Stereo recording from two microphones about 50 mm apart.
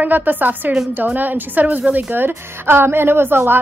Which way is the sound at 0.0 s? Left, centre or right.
Right.